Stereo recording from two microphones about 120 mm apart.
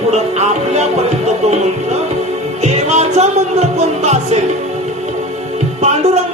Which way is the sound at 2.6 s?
70° right (ahead or behind).